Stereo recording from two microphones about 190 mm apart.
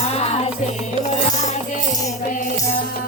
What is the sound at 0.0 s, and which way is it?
Music, 35° left (ahead or behind).